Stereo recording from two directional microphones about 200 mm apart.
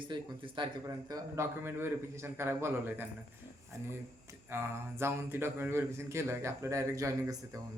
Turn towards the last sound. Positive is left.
turn(degrees=-15)  # may be behind; listen again after turning